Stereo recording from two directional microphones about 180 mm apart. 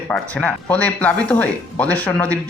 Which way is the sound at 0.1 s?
5° left (ahead or behind).